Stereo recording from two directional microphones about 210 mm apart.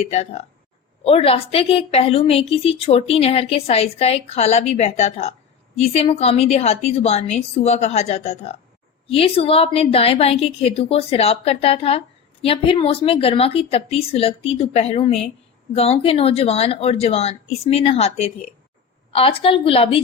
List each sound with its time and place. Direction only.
0.0 s a woman's voice: 30° left (ahead or behind)